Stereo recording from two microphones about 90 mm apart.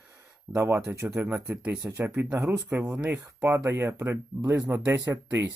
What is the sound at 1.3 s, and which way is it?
Speech, 25° right (ahead or behind).